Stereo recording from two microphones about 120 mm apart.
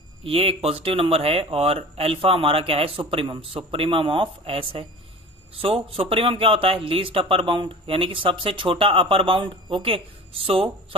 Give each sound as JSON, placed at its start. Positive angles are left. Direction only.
{"t": 0.3, "sound": "speech", "side_deg": -50}